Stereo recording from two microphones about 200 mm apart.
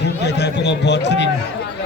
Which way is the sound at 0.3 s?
60° left (ahead or behind).